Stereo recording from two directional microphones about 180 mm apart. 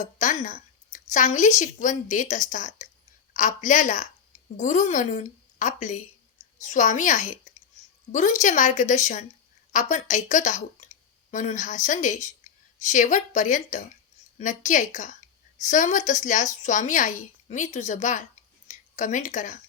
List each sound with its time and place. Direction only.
0.0 s a woman's voice: 45° left (ahead or behind)